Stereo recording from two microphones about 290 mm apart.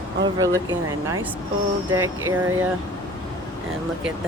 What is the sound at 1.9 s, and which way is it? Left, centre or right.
Speech, centre.